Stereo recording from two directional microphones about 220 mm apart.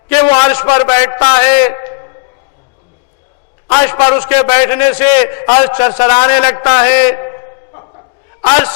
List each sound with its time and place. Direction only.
0.1 s a man's voice: 15° left (ahead or behind)
3.7 s a man's voice: 15° left (ahead or behind)